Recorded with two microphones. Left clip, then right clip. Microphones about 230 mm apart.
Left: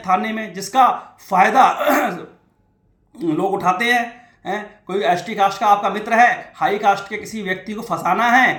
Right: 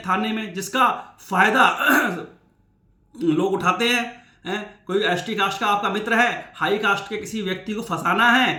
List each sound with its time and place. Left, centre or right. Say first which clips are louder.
0.0 s speech: left 4 dB; right
3.3 s speech: left 4 dB; right